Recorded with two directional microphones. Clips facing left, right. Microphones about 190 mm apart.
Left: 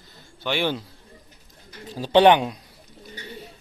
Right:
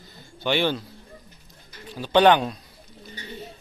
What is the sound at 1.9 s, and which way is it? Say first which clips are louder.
Speech: left 2 dB; 35° left (ahead or behind).